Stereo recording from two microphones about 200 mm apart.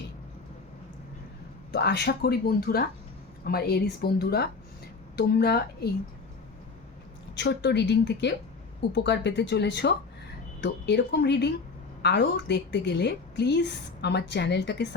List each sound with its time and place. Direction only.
1.7 s speech: 55° left (ahead or behind)
7.3 s a woman's voice: 60° left (ahead or behind)